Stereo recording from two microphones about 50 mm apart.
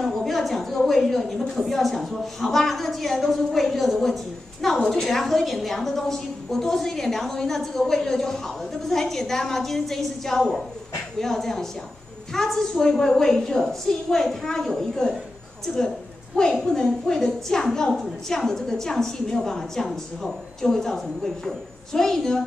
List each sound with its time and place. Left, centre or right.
0.0 s a sound: centre
1.6 s a woman's voice: centre
16.3 s a woman's voice: left